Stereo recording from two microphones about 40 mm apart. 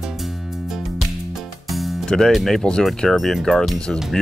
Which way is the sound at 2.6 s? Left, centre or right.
Left.